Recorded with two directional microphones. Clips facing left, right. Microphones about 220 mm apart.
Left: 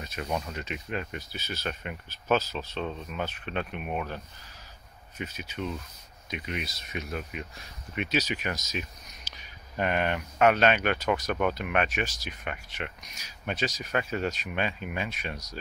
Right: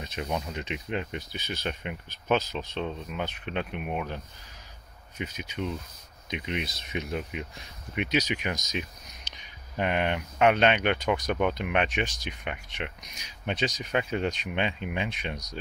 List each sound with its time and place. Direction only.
0.0 s a sound: 20° right (ahead or behind)
0.5 s speech: 20° right (ahead or behind)
5.2 s speech: 15° right (ahead or behind)